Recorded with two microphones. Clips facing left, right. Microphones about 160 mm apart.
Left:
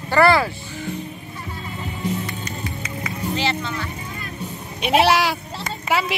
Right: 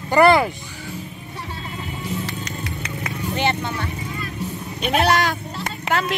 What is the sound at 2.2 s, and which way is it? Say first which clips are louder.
Music: even; 80° right.